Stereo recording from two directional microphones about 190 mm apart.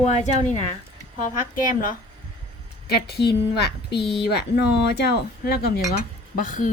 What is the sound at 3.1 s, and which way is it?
Speech, 60° left (ahead or behind).